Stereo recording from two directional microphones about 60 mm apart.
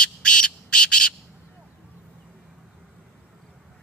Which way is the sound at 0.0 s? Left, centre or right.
Centre.